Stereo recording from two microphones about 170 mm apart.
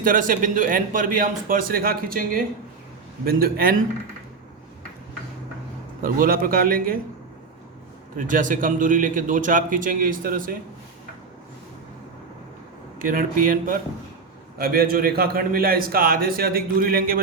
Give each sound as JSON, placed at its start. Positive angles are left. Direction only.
{"t": 0.0, "sound": "a man's voice", "side_deg": -50}
{"t": 6.0, "sound": "a man's voice", "side_deg": -55}
{"t": 8.1, "sound": "a man's voice", "side_deg": -50}
{"t": 13.0, "sound": "a man's voice", "side_deg": -55}